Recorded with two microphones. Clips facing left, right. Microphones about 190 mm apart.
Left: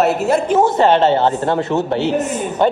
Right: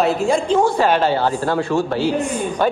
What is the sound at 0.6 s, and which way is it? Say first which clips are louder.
Speech: left 3 dB; 20° left (ahead or behind).